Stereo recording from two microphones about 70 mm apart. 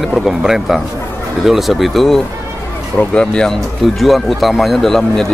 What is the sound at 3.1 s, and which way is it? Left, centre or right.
Speech, centre.